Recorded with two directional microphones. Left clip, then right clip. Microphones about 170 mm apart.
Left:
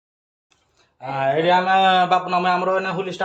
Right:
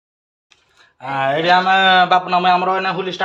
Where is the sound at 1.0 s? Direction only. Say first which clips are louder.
Right 3 dB; 5° right (ahead or behind).